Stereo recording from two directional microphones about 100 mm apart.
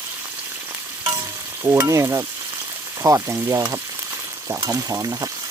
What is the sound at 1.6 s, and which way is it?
Speech, 30° right (ahead or behind).